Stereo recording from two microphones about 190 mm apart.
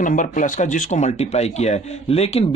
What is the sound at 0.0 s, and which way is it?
Speech, 45° left (ahead or behind).